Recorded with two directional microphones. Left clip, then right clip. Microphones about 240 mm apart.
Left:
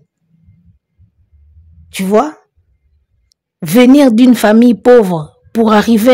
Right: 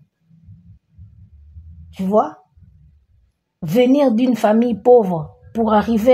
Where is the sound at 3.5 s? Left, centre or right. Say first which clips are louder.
Left 7 dB; left.